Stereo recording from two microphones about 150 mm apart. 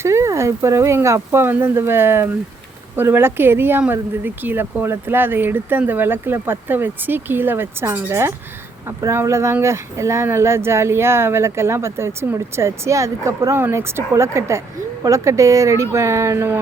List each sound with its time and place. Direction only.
0.0 s speech: 20° right (ahead or behind)